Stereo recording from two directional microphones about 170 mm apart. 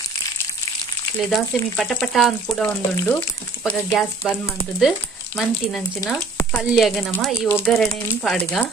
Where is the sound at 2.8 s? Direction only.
15° left (ahead or behind).